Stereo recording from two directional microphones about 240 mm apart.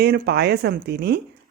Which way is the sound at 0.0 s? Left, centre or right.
Right.